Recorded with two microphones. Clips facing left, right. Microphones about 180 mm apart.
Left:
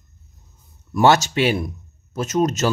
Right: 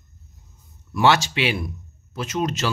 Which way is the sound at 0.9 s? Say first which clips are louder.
Left 3 dB; 45° left (ahead or behind).